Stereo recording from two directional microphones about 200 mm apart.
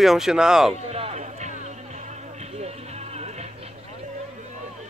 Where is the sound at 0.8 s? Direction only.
30° right (ahead or behind).